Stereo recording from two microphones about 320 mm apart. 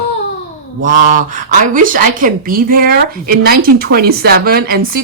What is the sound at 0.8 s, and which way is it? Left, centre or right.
Speech, right.